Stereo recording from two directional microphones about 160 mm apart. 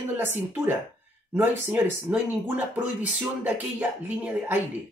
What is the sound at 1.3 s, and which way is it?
Speech, 10° right (ahead or behind).